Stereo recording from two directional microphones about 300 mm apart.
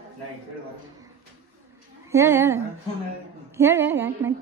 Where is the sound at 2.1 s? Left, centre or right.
Centre.